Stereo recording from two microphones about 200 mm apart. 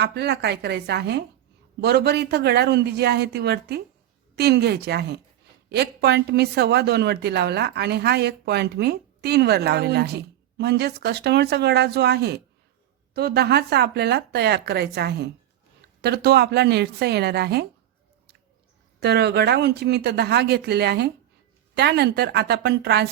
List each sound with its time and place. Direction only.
0.0 s a woman's voice: 55° right (ahead or behind)
18.9 s a woman's voice: 55° right (ahead or behind)